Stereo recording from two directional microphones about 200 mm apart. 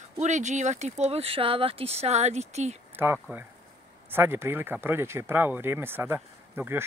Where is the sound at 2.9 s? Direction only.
10° right (ahead or behind).